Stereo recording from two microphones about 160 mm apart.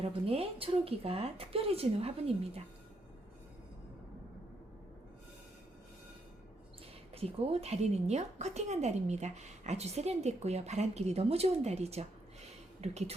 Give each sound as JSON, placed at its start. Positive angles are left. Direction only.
{"t": 0.0, "sound": "speech", "side_deg": -35}
{"t": 7.1, "sound": "a woman's voice", "side_deg": -40}